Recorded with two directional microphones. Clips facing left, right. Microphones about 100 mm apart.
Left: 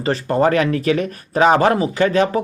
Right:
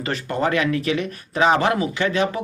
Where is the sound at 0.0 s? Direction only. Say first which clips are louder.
Left 6 dB; 35° left (ahead or behind).